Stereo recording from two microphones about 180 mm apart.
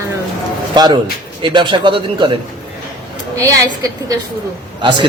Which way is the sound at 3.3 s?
20° right (ahead or behind).